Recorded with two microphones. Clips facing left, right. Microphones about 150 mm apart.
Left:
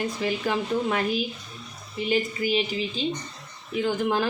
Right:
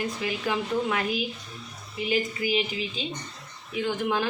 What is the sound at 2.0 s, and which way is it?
Speech, 35° left (ahead or behind).